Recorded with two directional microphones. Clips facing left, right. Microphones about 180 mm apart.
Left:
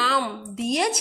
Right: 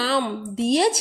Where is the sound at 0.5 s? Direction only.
30° right (ahead or behind).